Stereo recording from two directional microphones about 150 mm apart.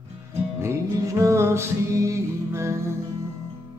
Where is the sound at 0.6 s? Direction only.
20° right (ahead or behind).